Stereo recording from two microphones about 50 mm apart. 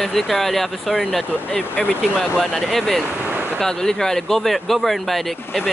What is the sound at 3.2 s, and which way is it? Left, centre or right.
Vehicle, right.